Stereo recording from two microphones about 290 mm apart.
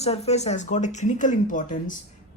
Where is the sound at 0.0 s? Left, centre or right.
Left.